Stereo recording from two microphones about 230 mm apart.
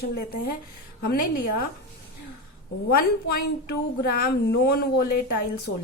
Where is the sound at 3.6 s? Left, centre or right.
Left.